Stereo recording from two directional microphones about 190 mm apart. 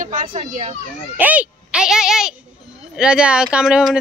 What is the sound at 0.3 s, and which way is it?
Speech, 40° right (ahead or behind).